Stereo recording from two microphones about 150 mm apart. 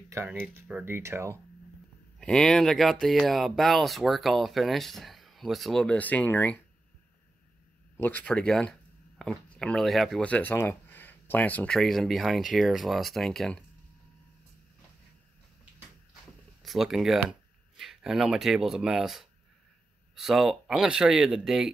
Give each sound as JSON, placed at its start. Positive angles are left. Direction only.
{"t": 0.1, "sound": "speech", "side_deg": -15}
{"t": 2.1, "sound": "speech", "side_deg": 5}
{"t": 8.0, "sound": "speech", "side_deg": 10}
{"t": 16.6, "sound": "speech", "side_deg": 0}